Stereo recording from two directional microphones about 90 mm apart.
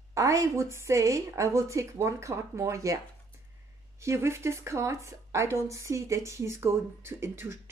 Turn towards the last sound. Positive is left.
turn(degrees=-30)  # may be behind; listen again after turning